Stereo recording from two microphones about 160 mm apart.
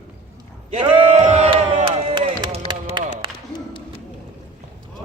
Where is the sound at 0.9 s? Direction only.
40° right (ahead or behind).